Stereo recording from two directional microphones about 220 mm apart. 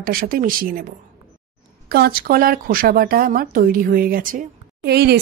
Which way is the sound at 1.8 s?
45° right (ahead or behind).